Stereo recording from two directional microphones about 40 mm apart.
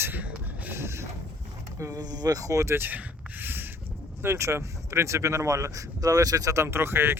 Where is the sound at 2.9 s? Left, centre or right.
Right.